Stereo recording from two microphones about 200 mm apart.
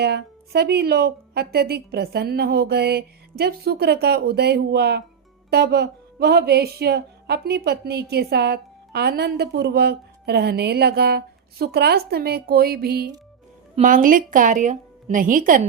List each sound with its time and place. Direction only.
0.0 s a woman's voice: 55° right (ahead or behind)
13.7 s a woman's voice: 40° right (ahead or behind)